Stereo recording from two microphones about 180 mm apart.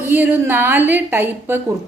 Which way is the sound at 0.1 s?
10° right (ahead or behind).